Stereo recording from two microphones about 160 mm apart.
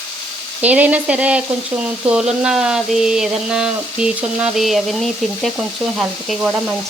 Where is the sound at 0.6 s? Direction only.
10° right (ahead or behind).